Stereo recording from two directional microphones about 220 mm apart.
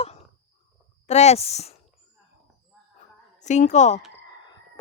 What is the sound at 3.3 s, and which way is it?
Speech, 35° left (ahead or behind).